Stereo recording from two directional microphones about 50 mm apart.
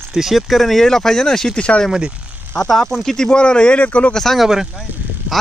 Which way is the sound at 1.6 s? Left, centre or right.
Left.